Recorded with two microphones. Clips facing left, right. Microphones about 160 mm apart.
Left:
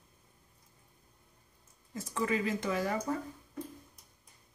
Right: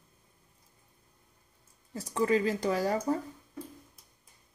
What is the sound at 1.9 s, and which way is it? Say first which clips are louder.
Speech: right 5 dB; 35° right (ahead or behind).